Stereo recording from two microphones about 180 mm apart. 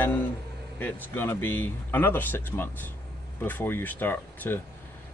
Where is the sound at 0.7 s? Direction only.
10° left (ahead or behind).